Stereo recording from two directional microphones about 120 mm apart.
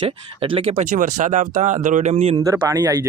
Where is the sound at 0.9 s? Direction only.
90° right; by 2.4 s 60° right (ahead or behind).